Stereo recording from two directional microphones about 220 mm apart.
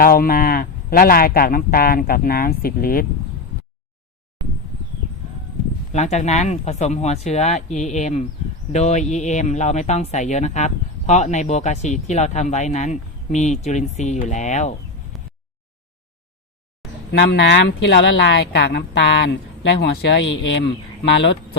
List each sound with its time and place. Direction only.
0.0 s speech: 40° left (ahead or behind)
5.9 s speech: 30° left (ahead or behind)
17.1 s speech: 50° left (ahead or behind)